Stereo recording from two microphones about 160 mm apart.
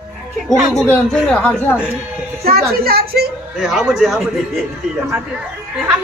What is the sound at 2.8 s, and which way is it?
Speech, 70° right (ahead or behind).